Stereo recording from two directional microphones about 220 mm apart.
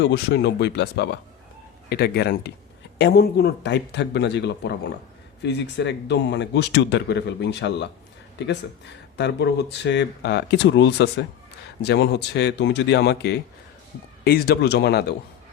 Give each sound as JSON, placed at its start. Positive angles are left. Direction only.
{"t": 0.0, "sound": "speech", "side_deg": 50}
{"t": 9.1, "sound": "speech", "side_deg": 50}